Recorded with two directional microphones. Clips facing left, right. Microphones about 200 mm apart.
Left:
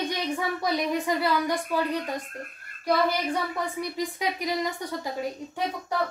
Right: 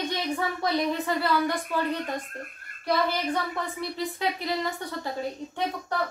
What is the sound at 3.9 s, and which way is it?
A woman's voice, 15° left (ahead or behind).